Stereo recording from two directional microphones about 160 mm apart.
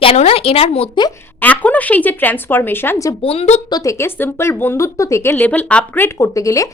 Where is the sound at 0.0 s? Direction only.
40° left (ahead or behind).